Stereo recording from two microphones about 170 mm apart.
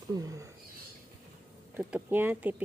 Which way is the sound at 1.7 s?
10° right (ahead or behind).